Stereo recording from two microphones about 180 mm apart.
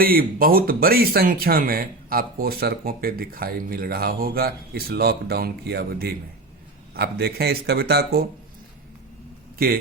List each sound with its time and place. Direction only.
0.0 s speech: 55° right (ahead or behind)
9.6 s a man's voice: 60° right (ahead or behind)